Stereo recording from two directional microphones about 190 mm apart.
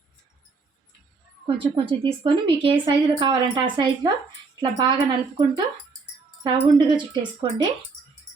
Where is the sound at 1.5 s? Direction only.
25° right (ahead or behind).